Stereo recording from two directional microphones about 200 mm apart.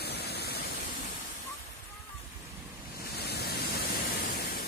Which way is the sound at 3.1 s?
55° left (ahead or behind).